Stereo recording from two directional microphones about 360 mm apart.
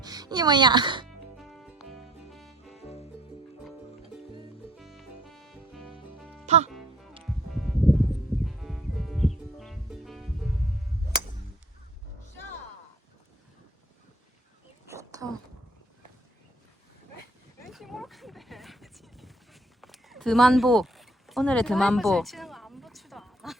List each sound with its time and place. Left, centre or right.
0.0 s speech: centre
1.0 s music: centre
2.7 s music: centre
4.8 s music: centre
6.4 s music: centre
7.6 s music: centre
14.8 s a sound: centre
17.7 s a sound: centre